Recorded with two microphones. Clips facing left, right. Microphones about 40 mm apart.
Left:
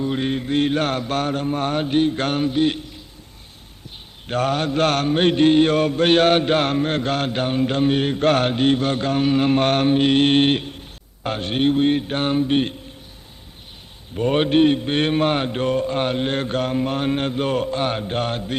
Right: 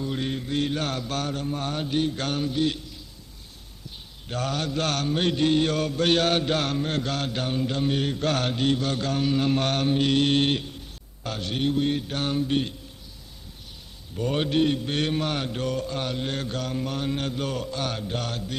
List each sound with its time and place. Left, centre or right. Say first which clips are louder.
0.0 s mantra: left 6 dB; left
14.2 s mantra: left 7 dB; left